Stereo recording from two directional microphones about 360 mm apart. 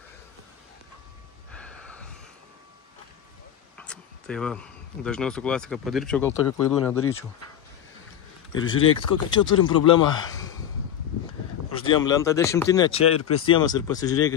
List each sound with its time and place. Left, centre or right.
3.7 s speech: centre
8.7 s speech: left
9.4 s speech: centre
11.7 s speech: centre